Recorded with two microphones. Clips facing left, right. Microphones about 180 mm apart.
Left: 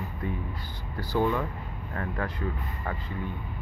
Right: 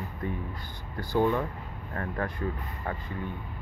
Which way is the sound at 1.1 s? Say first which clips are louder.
Right 1 dB; 20° right (ahead or behind).